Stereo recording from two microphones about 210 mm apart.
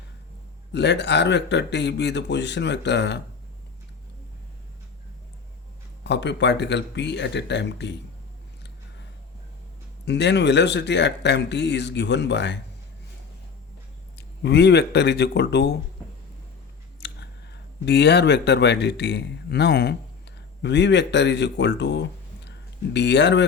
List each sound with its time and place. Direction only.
0.7 s speech: 55° left (ahead or behind)
6.0 s speech: 55° left (ahead or behind)
10.1 s speech: 55° left (ahead or behind)
14.2 s speech: 55° left (ahead or behind)
17.0 s speech: 55° left (ahead or behind)
22.4 s a sound: 55° left (ahead or behind)